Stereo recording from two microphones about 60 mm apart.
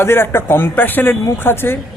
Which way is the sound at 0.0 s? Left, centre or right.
Left.